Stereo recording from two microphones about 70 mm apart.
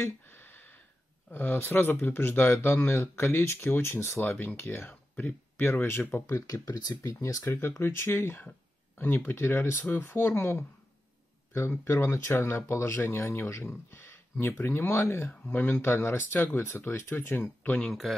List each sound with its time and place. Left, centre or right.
0.3 s a sound: left
1.3 s speech: left
4.2 s speech: left
7.8 s speech: left
17.7 s speech: centre